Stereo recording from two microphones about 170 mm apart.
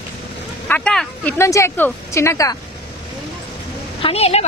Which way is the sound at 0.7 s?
5° left (ahead or behind).